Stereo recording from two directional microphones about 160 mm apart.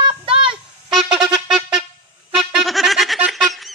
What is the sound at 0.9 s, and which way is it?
Music, centre (ahead or behind).